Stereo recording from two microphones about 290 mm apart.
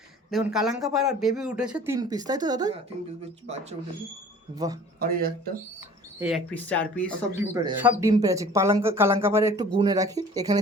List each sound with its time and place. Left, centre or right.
0.3 s speech: centre
4.9 s speech: right
6.1 s speech: centre
7.5 s speech: centre